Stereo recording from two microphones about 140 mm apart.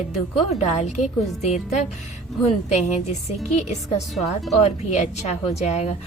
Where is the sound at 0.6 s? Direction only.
55° left (ahead or behind).